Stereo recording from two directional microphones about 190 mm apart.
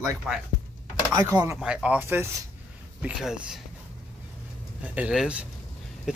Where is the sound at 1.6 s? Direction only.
5° right (ahead or behind).